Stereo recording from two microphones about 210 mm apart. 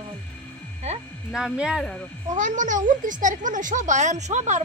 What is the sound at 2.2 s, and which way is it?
Speech, 35° right (ahead or behind).